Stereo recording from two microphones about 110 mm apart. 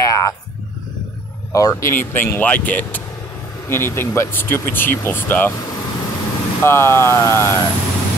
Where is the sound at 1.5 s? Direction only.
30° left (ahead or behind).